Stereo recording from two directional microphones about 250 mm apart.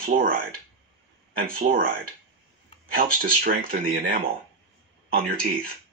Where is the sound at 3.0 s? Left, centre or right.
Right.